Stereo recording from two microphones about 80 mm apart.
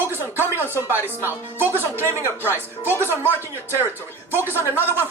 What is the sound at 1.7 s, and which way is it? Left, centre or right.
A man's voice, left.